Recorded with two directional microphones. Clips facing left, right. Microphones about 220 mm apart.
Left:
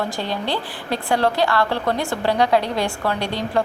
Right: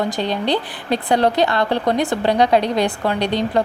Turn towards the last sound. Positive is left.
turn(degrees=-20)  # may be behind; listen again after turning